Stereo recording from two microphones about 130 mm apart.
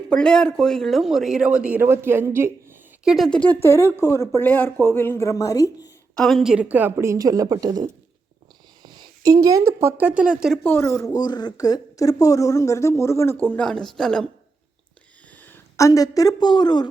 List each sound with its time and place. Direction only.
0.1 s a woman's voice: 5° left (ahead or behind); by 2.7 s 20° right (ahead or behind)
3.0 s speech: 5° right (ahead or behind)
3.2 s a woman's voice: 10° left (ahead or behind); by 5.9 s 25° left (ahead or behind)
6.1 s a woman's voice: centre (ahead or behind)
10.6 s a woman's voice: 15° left (ahead or behind)
13.7 s speech: 5° left (ahead or behind)
15.4 s speech: 15° left (ahead or behind); by 16.9 s 35° left (ahead or behind)